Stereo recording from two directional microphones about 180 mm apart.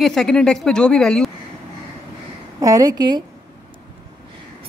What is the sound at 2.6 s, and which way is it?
Speech, 20° right (ahead or behind).